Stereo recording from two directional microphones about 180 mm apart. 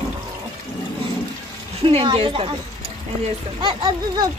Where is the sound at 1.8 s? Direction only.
30° right (ahead or behind).